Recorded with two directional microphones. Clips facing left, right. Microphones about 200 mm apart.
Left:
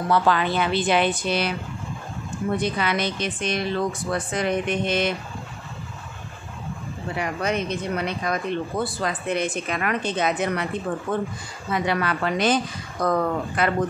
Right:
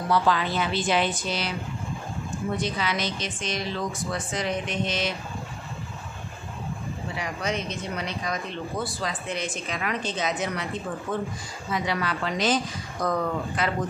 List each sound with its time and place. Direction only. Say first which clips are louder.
0.1 s speech: left 3 dB; 60° left (ahead or behind)
2.5 s speech: left 5 dB; 55° left (ahead or behind)
7.2 s speech: left 5 dB; 55° left (ahead or behind)